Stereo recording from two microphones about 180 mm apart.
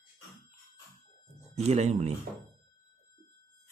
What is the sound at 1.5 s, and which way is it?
Speech, 35° right (ahead or behind).